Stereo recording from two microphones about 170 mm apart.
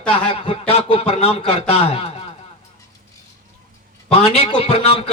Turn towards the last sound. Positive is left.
turn(degrees=35)  # may be behind; listen again after turning